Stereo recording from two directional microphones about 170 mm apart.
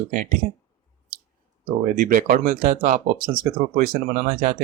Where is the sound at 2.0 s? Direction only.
55° right (ahead or behind).